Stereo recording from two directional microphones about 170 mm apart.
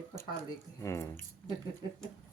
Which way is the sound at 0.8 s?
15° left (ahead or behind).